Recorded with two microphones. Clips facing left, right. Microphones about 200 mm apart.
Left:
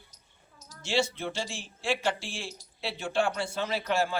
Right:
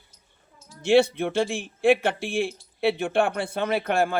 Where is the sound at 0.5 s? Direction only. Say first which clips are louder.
Right 3 dB; 40° left (ahead or behind).